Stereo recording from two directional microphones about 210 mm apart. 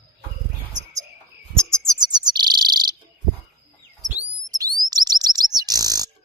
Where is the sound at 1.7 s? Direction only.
15° right (ahead or behind).